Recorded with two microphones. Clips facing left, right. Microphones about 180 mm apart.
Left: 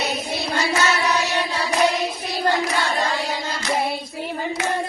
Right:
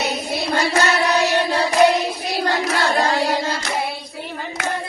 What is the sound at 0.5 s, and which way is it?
Child singing, 60° right (ahead or behind).